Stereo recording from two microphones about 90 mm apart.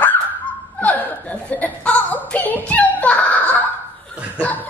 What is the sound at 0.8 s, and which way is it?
A woman's voice, 15° left (ahead or behind).